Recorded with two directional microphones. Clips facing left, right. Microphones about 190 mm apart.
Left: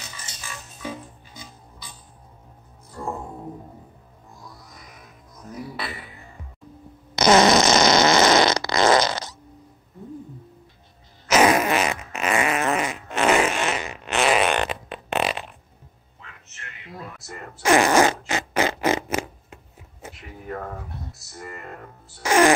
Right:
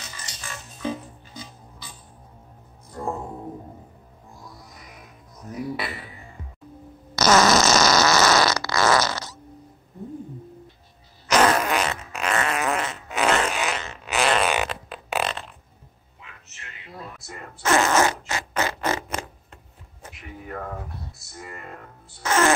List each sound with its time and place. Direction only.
7.2 s fart: 25° left (ahead or behind)
11.2 s fart: 10° left (ahead or behind)
17.6 s fart: 15° left (ahead or behind)
18.8 s a sound: 15° left (ahead or behind)
19.1 s a sound: 5° left (ahead or behind)
22.2 s music: 15° left (ahead or behind)